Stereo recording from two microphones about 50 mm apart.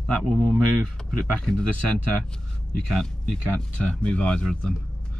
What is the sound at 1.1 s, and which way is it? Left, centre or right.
Speech, centre.